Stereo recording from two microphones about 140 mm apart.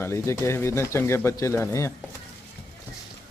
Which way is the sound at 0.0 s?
20° left (ahead or behind).